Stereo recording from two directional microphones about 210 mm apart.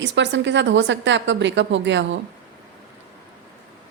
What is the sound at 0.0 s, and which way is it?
A woman's voice, 60° right (ahead or behind).